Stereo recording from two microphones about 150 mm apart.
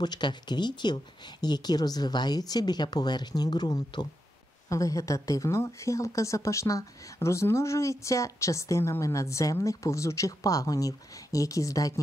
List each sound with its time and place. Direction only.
0.0 s speech: 30° left (ahead or behind)